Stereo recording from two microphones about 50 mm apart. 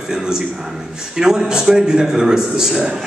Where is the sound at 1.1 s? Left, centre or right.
Centre.